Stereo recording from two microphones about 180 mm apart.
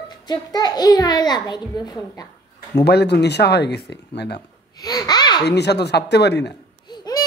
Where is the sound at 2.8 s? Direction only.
65° left (ahead or behind).